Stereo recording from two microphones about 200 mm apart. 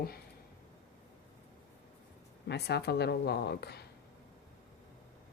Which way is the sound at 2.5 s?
55° left (ahead or behind).